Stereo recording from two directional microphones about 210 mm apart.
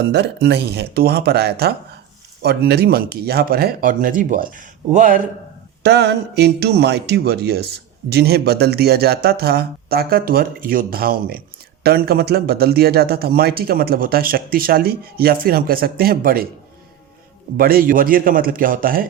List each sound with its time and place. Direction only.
0.0 s speech: 55° right (ahead or behind); by 5.2 s 35° right (ahead or behind)
5.8 s speech: 50° right (ahead or behind)
17.6 s speech: 45° right (ahead or behind)